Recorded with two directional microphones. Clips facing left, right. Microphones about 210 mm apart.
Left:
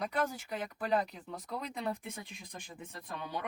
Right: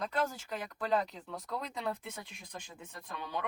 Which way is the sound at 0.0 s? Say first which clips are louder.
Even; 15° left (ahead or behind).